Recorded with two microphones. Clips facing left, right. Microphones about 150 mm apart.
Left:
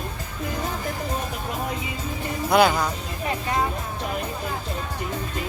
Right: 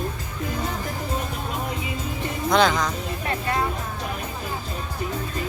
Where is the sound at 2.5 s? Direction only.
10° left (ahead or behind).